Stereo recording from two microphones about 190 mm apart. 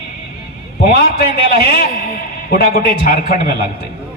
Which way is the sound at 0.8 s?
55° left (ahead or behind).